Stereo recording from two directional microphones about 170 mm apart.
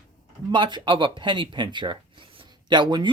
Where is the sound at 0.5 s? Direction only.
30° right (ahead or behind).